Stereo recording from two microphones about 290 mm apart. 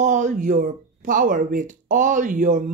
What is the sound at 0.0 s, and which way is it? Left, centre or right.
Speech, right.